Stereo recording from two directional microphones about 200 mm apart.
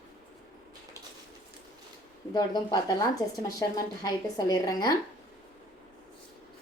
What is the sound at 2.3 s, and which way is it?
A woman's voice, 20° left (ahead or behind).